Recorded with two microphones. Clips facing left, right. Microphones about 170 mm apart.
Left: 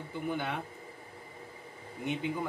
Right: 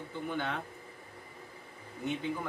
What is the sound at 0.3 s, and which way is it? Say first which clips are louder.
Speech: left 1 dB; 10° left (ahead or behind).